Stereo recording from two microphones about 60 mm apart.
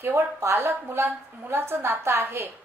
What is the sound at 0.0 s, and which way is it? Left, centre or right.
A woman's voice, right.